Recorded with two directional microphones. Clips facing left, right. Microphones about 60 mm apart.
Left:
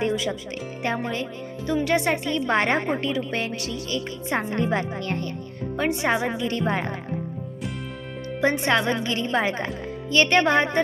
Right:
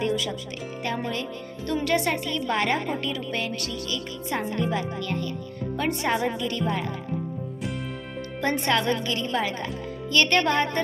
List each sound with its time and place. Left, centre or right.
0.0 s music: left
0.8 s speech: left
3.8 s a woman's voice: left
5.7 s speech: left
8.4 s speech: centre